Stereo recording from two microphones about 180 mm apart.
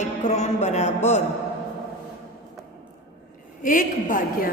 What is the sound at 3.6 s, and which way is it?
Speech, 45° left (ahead or behind).